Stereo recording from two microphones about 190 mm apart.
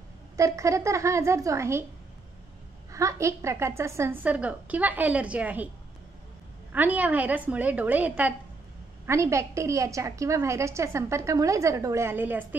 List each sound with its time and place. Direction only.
0.4 s a woman's voice: 15° right (ahead or behind)
2.9 s a woman's voice: 15° right (ahead or behind)
6.7 s a woman's voice: 10° right (ahead or behind)